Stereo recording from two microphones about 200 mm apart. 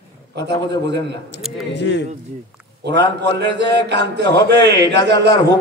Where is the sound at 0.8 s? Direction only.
55° right (ahead or behind).